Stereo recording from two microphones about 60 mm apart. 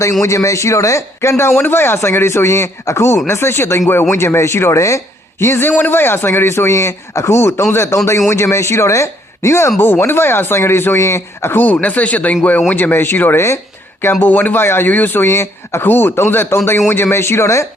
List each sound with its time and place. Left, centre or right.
0.0 s speech: left
1.5 s a man's voice: left
7.9 s speech: left
9.7 s speech: left
11.6 s a man's voice: left